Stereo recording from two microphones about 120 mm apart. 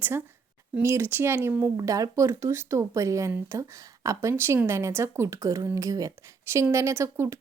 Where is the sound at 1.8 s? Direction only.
30° right (ahead or behind).